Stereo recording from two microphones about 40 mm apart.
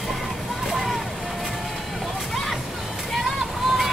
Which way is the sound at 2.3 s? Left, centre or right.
Centre.